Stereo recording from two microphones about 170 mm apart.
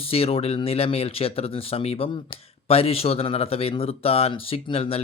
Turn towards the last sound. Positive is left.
turn(degrees=35)  # may be behind; listen again after turning